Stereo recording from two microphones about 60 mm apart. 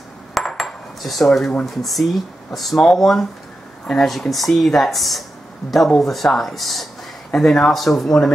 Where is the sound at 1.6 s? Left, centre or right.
Centre.